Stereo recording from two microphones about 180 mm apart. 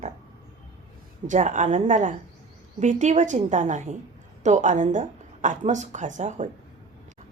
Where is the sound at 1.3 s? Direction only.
45° right (ahead or behind).